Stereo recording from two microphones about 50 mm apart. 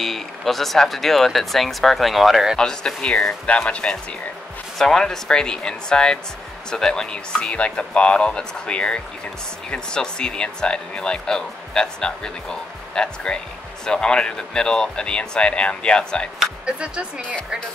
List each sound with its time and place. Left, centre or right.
0.0 s speech: centre
2.5 s speech: centre
4.7 s speech: centre
16.6 s speech: right